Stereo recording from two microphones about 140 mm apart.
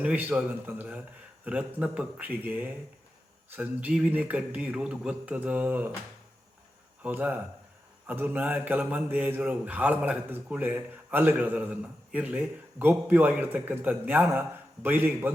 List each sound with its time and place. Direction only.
0.0 s a man's voice: 10° right (ahead or behind)
7.0 s a man's voice: 10° right (ahead or behind)